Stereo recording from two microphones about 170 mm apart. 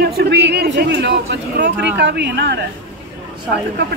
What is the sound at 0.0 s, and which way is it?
A man's voice, 70° right (ahead or behind).